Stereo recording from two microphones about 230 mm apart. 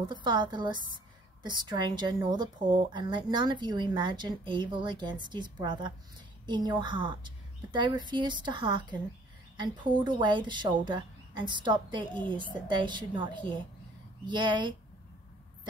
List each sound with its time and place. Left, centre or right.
0.1 s a woman's voice: centre